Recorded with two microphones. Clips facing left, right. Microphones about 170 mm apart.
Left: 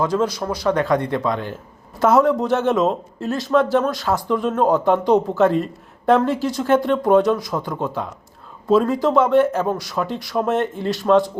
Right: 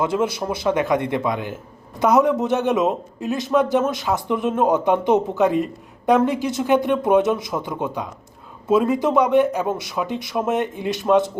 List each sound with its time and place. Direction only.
0.3 s speech: 25° right (ahead or behind)